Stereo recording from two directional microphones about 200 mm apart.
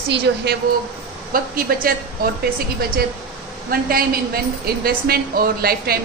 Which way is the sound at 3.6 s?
50° right (ahead or behind).